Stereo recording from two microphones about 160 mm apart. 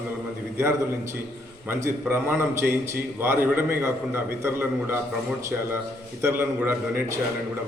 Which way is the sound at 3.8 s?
15° right (ahead or behind).